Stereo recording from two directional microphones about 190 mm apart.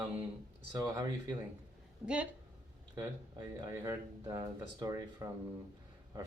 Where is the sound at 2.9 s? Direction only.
15° right (ahead or behind).